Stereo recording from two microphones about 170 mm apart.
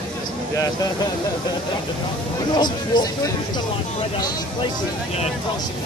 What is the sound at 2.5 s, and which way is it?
Speech, 25° left (ahead or behind).